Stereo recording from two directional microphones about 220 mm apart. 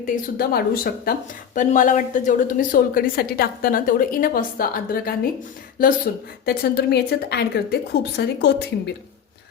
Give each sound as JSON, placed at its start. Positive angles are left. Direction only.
{"t": 0.0, "sound": "a woman's voice", "side_deg": 45}